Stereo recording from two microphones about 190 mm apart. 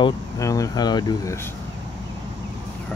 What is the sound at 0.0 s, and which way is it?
Speech, 15° left (ahead or behind).